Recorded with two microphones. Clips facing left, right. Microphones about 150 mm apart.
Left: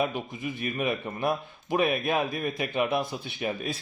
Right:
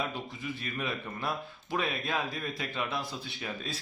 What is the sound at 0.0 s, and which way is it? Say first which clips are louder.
Speech: left 7 dB; 15° left (ahead or behind).